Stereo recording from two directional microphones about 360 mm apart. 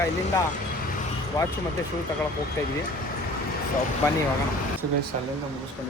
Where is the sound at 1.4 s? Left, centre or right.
Centre.